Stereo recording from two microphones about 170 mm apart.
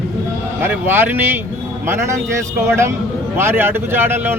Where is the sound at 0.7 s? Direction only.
10° right (ahead or behind).